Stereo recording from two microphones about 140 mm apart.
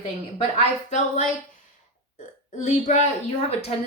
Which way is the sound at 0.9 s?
65° left (ahead or behind).